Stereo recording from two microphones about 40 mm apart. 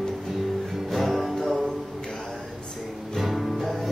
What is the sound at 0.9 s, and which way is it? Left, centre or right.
Music, centre.